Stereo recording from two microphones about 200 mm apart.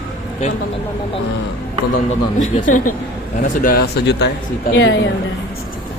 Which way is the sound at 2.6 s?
40° left (ahead or behind).